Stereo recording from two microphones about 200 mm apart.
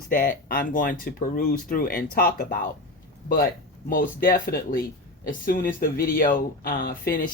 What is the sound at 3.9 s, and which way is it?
Speech, 45° left (ahead or behind).